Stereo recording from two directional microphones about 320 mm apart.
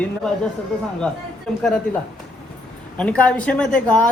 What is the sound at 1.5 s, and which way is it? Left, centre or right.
Speech, centre.